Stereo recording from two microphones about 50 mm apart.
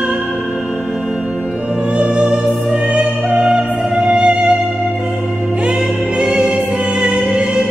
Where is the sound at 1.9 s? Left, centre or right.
Centre.